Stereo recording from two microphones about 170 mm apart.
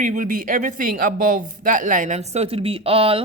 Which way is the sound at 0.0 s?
50° right (ahead or behind).